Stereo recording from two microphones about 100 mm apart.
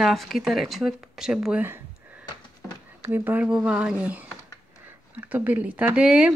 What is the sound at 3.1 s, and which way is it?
Speech, 20° right (ahead or behind).